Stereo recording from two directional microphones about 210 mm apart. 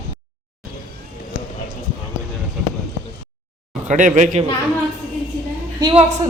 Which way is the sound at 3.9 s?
35° right (ahead or behind).